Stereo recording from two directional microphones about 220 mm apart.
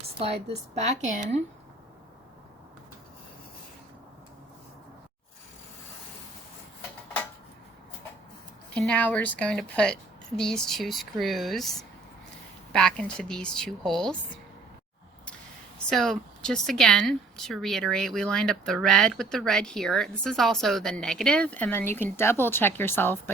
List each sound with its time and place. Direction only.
0.2 s a woman's voice: 25° right (ahead or behind)
8.7 s a woman's voice: 5° left (ahead or behind)
15.9 s a woman's voice: centre (ahead or behind)